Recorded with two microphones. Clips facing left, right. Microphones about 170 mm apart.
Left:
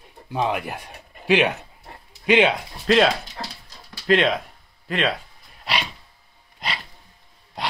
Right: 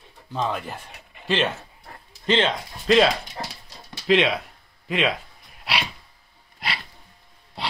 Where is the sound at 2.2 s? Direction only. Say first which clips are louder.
Left 4 dB; 10° left (ahead or behind).